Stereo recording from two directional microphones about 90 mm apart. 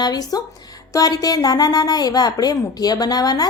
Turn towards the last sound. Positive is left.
turn(degrees=45)  # may be behind; listen again after turning